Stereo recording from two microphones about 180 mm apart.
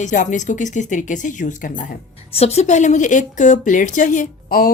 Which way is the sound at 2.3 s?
35° left (ahead or behind).